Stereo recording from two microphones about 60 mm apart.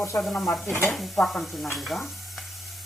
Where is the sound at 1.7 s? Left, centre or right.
Centre.